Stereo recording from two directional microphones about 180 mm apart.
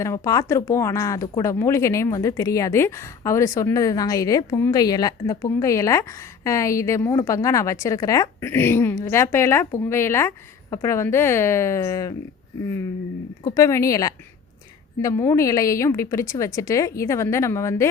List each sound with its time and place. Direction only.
0.0 s speech: 15° left (ahead or behind)
13.4 s speech: 20° left (ahead or behind)